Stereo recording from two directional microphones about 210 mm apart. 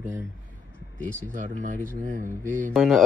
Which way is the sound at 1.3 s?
35° right (ahead or behind).